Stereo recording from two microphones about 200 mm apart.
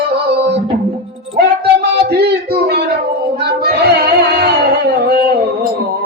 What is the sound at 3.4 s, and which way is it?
Child singing, 50° right (ahead or behind).